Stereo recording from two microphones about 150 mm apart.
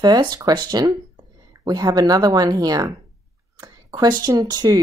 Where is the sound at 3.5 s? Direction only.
25° right (ahead or behind).